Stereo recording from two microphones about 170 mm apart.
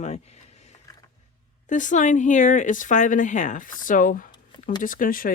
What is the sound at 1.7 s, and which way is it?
Speech, 45° left (ahead or behind).